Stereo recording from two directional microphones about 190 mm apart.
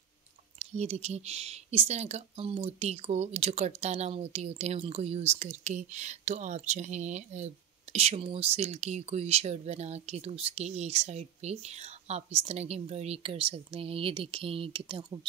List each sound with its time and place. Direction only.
0.6 s speech: 35° right (ahead or behind)